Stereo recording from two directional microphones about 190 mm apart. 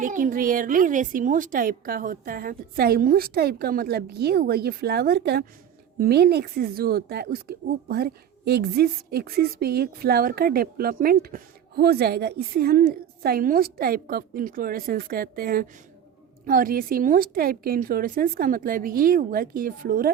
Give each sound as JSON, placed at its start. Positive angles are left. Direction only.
{"t": 0.0, "sound": "speech", "side_deg": -45}